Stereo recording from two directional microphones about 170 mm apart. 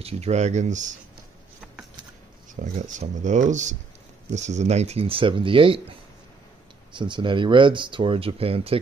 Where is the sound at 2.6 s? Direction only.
45° right (ahead or behind); by 5.8 s 30° right (ahead or behind).